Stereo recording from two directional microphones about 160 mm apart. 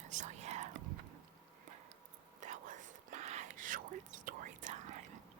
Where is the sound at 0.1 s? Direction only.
50° right (ahead or behind).